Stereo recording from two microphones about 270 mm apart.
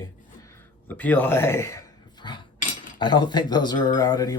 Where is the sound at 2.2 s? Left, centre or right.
Centre.